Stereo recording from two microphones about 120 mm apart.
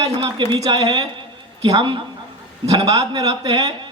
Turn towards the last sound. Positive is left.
turn(degrees=-35)  # may be behind; listen again after turning